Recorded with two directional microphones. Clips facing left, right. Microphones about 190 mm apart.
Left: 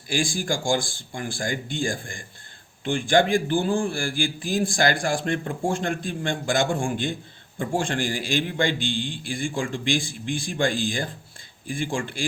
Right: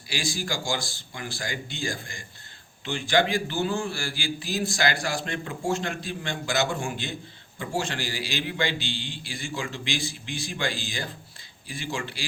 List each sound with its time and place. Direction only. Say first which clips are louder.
0.1 s a man's voice: left 5 dB; 50° left (ahead or behind)